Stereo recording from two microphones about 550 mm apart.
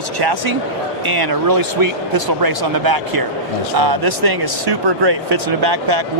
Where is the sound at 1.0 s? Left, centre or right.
Right.